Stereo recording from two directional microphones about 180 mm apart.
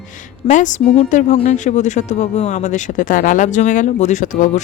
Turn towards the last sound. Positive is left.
turn(degrees=45)  # may be behind; listen again after turning